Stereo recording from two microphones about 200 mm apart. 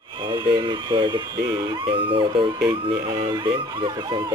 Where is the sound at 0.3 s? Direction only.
20° right (ahead or behind).